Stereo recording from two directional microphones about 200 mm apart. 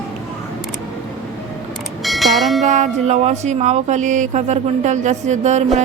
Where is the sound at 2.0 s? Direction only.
Centre (ahead or behind).